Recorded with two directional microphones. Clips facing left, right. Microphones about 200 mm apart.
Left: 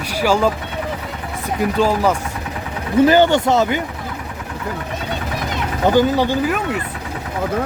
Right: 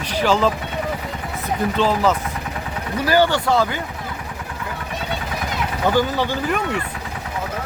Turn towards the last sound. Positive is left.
turn(degrees=15)  # may be behind; listen again after turning